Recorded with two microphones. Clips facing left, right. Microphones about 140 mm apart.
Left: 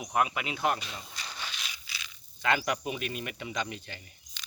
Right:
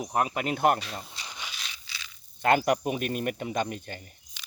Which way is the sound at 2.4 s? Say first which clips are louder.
Right 6 dB; 50° right (ahead or behind).